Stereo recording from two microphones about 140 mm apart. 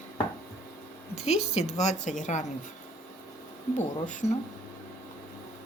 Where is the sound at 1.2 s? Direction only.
50° left (ahead or behind).